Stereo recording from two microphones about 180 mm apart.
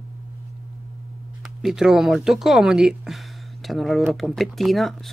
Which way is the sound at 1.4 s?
Centre (ahead or behind).